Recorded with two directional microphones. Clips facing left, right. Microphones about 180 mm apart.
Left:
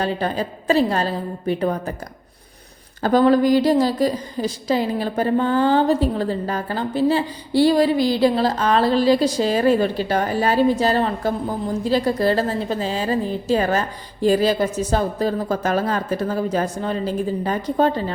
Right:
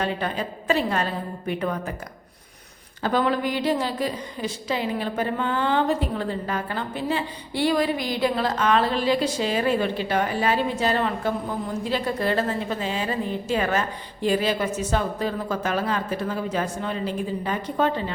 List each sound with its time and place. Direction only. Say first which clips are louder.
0.0 s a woman's voice: left 4 dB; 35° left (ahead or behind)
3.0 s a woman's voice: left 8 dB; 40° left (ahead or behind)